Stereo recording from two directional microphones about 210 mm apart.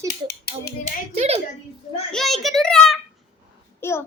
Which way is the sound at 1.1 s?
30° right (ahead or behind).